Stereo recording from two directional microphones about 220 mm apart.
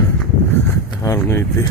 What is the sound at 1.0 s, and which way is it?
Speech, 15° left (ahead or behind).